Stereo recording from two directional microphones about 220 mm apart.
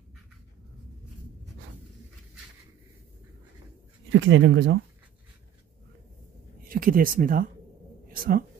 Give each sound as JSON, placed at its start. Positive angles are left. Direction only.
{"t": 4.1, "sound": "speech", "side_deg": -60}
{"t": 6.7, "sound": "speech", "side_deg": -40}